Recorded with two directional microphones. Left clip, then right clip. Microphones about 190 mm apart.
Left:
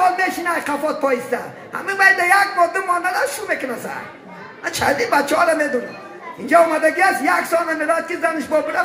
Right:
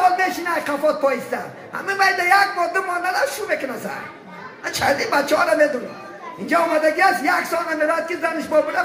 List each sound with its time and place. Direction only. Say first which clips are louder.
0.2 s speech: left 1 dB; 15° left (ahead or behind)
4.6 s speech: left 2 dB; 15° left (ahead or behind)